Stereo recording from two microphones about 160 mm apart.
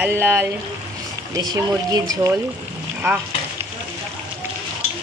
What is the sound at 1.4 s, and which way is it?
Speech, 25° right (ahead or behind).